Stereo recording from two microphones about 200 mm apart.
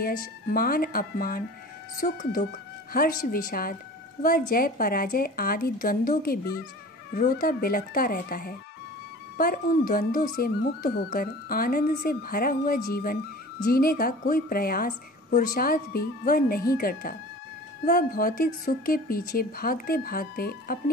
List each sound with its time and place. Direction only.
0.0 s speech: 45° left (ahead or behind)